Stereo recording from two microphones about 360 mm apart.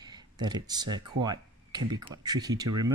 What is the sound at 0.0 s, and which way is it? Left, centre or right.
Speech, centre.